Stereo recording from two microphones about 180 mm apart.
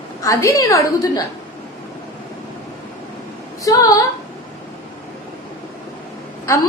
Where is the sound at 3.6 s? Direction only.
20° left (ahead or behind).